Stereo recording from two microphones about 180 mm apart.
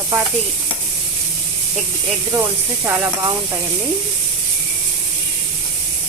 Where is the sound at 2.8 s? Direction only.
10° right (ahead or behind).